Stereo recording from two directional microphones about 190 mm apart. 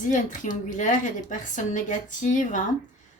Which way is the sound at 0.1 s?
40° left (ahead or behind).